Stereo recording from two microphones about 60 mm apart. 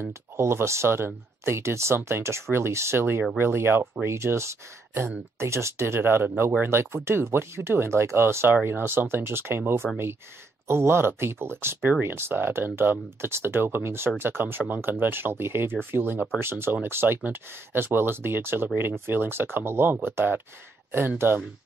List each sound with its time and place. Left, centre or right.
0.4 s speech: right